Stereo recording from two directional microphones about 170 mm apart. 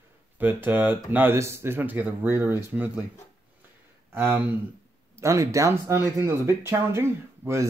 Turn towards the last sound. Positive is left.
turn(degrees=-15)  # may be behind; listen again after turning